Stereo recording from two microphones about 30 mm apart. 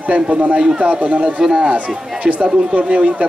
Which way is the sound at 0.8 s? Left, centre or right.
Right.